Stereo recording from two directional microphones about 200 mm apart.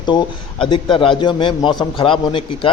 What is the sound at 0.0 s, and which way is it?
A man's voice, 20° left (ahead or behind).